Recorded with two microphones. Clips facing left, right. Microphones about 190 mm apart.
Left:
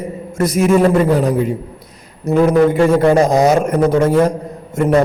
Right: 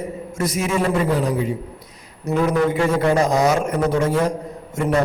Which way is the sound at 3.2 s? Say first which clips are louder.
Left 5 dB; 35° left (ahead or behind).